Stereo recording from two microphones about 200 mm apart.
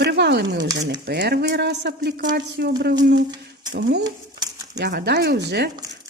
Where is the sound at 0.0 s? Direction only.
60° right (ahead or behind).